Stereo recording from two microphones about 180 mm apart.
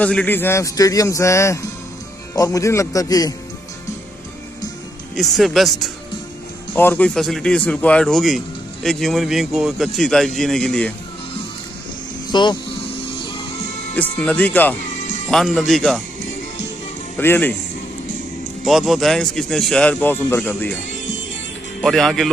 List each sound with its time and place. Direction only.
0.0 s a man's voice: 5° left (ahead or behind)
5.1 s speech: centre (ahead or behind)
6.7 s speech: 10° left (ahead or behind)
12.3 s speech: 25° left (ahead or behind)
13.9 s speech: 5° left (ahead or behind)
15.0 s music: 45° left (ahead or behind)
15.2 s speech: 5° left (ahead or behind)
17.2 s speech: 10° left (ahead or behind)
18.7 s speech: centre (ahead or behind)
21.8 s speech: centre (ahead or behind)